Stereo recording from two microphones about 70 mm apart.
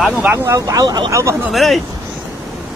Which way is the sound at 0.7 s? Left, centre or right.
Right.